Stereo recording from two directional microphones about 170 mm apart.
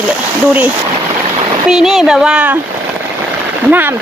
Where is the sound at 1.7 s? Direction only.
Centre (ahead or behind).